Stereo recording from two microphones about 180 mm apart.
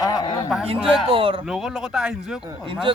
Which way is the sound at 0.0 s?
20° left (ahead or behind).